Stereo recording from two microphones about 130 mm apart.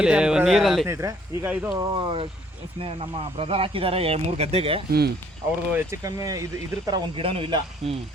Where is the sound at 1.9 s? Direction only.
45° right (ahead or behind).